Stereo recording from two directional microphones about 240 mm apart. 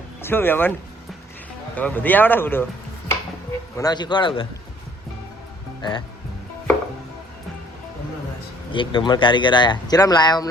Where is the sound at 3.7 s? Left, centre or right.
Centre.